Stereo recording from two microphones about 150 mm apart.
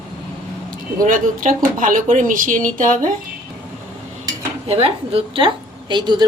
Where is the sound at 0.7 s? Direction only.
65° right (ahead or behind).